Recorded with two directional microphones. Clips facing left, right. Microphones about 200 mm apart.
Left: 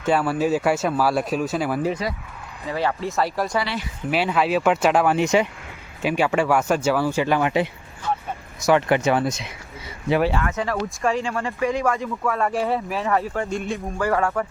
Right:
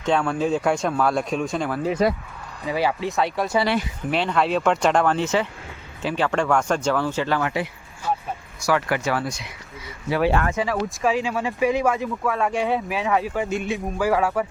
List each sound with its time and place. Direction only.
0.0 s speech: 5° left (ahead or behind)
2.6 s speech: 10° right (ahead or behind); by 9.5 s 20° left (ahead or behind)
10.5 s speech: 5° right (ahead or behind)